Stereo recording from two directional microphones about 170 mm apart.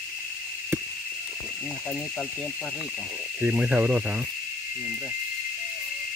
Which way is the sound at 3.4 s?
10° right (ahead or behind).